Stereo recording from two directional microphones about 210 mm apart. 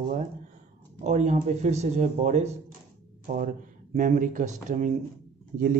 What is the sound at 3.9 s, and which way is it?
Speech, 40° right (ahead or behind).